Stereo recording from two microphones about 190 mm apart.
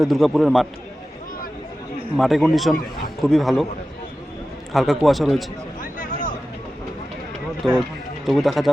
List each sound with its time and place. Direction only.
0.0 s a man's voice: centre (ahead or behind)
2.1 s a man's voice: centre (ahead or behind)
4.7 s a man's voice: centre (ahead or behind)
5.8 s a sound: 45° left (ahead or behind)
7.6 s a man's voice: centre (ahead or behind)